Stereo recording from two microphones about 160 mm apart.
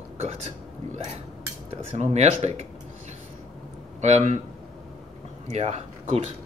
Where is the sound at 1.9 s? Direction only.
45° right (ahead or behind).